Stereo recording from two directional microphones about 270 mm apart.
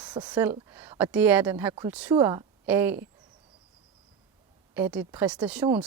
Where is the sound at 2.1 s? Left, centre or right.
Centre.